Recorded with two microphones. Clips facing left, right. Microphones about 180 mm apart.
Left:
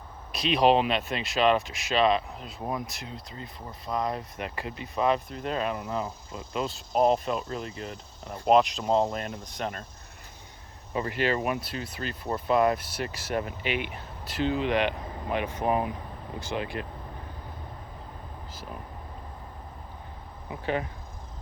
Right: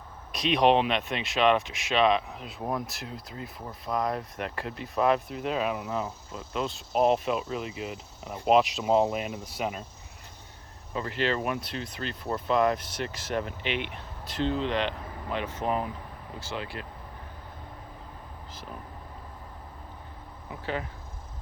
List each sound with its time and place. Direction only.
0.3 s speech: centre (ahead or behind)
10.9 s speech: 15° left (ahead or behind)
20.5 s speech: 20° left (ahead or behind)